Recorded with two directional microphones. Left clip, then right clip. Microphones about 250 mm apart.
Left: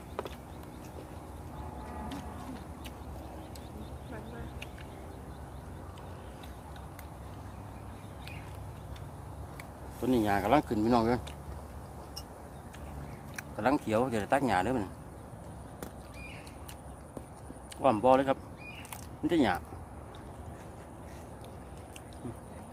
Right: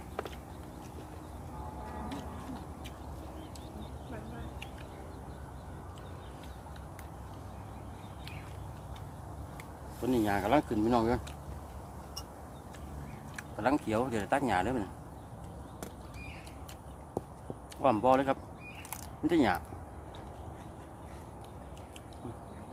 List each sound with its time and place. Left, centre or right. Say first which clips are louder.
10.0 s speech: left 2 dB; centre
13.3 s speech: left 1 dB; centre
17.8 s speech: left 2 dB; centre